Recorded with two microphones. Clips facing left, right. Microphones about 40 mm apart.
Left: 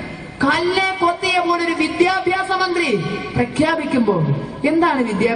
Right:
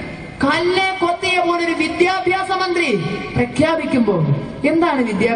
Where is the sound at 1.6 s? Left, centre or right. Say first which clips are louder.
Even; right.